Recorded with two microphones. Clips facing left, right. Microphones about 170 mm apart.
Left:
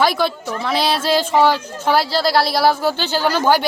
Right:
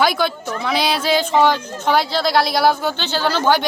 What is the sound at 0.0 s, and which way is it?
Speech, centre (ahead or behind).